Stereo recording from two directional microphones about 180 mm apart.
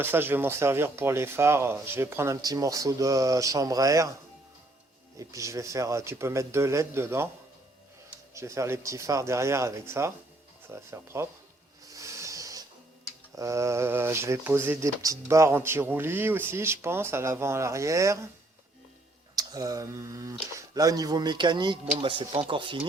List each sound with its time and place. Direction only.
0.0 s speech: 10° right (ahead or behind)
5.1 s speech: 15° right (ahead or behind)
8.3 s speech: 15° right (ahead or behind)
11.9 s a sound: 15° right (ahead or behind)
13.3 s speech: 15° right (ahead or behind)
19.4 s speech: 20° right (ahead or behind)